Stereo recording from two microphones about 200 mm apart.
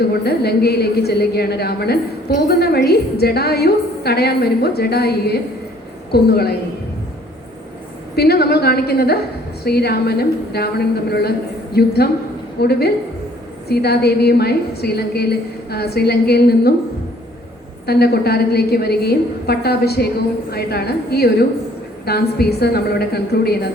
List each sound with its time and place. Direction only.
0.3 s a woman's voice: 55° left (ahead or behind)
8.1 s a woman's voice: 55° left (ahead or behind)
17.8 s a woman's voice: 50° left (ahead or behind)